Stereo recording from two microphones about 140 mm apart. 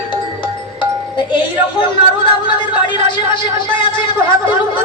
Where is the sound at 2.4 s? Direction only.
35° left (ahead or behind).